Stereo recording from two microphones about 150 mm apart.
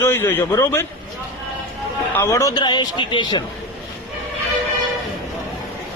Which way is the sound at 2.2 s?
20° left (ahead or behind).